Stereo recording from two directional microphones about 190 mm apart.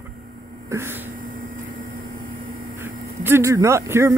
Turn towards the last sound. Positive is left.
turn(degrees=-15)  # may be behind; listen again after turning